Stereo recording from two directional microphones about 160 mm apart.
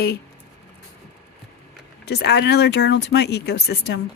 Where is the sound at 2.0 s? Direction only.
90° left.